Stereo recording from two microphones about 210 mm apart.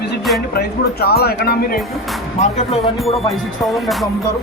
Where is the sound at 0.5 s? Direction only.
50° left (ahead or behind).